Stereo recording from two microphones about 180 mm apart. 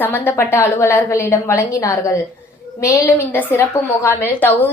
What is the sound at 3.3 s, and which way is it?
A woman's voice, 15° left (ahead or behind).